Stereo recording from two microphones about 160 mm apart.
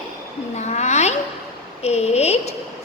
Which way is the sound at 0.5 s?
45° left (ahead or behind).